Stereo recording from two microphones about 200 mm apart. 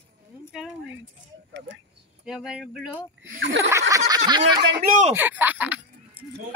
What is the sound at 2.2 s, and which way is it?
Speech, 5° right (ahead or behind).